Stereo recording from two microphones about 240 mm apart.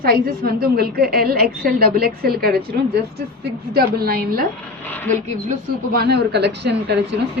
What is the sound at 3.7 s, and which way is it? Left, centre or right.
Speech, right.